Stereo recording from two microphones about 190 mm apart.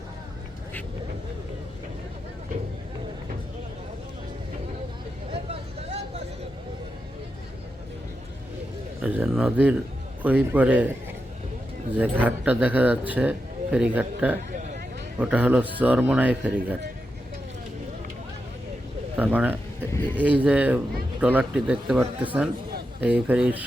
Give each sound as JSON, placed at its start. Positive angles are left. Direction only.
{"t": 5.3, "sound": "vehicle", "side_deg": -30}
{"t": 9.0, "sound": "speech", "side_deg": -10}
{"t": 11.9, "sound": "speech", "side_deg": -10}
{"t": 14.5, "sound": "vehicle", "side_deg": -40}
{"t": 15.2, "sound": "speech", "side_deg": -10}
{"t": 19.1, "sound": "speech", "side_deg": -10}